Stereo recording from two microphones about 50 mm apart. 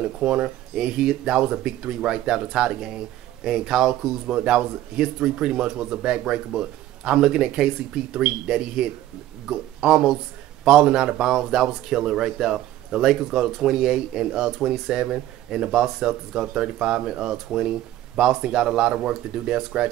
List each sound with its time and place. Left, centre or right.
0.2 s speech: right